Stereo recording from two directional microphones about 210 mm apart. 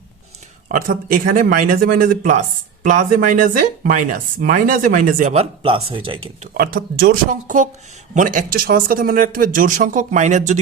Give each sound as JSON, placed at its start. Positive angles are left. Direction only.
{"t": 0.7, "sound": "speech", "side_deg": -40}
{"t": 6.4, "sound": "speech", "side_deg": -45}